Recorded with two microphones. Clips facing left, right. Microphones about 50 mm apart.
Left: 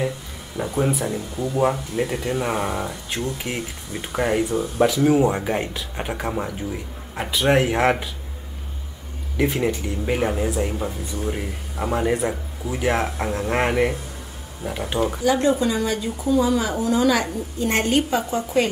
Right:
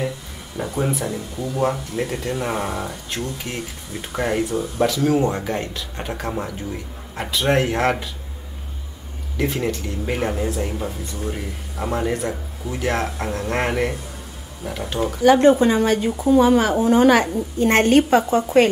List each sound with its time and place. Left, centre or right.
0.7 s speech: centre
3.5 s speech: centre
4.0 s speech: centre
9.4 s speech: centre
15.2 s a woman's voice: right
17.6 s a woman's voice: right